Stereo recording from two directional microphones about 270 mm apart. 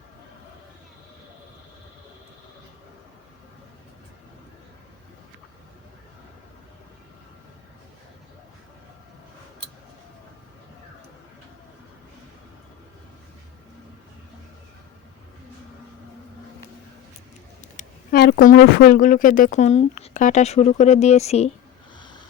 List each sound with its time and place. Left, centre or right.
17.7 s speech: left